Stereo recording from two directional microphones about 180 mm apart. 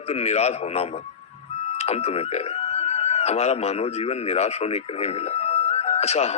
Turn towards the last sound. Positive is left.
turn(degrees=35)  # may be behind; listen again after turning